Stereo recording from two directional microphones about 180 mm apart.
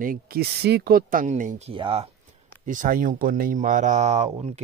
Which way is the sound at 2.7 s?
50° right (ahead or behind).